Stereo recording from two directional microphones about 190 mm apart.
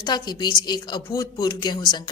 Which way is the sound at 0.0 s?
20° left (ahead or behind).